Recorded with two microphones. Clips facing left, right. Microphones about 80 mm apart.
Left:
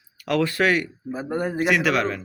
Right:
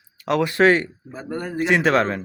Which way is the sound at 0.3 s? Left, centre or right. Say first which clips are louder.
Right 4 dB; right.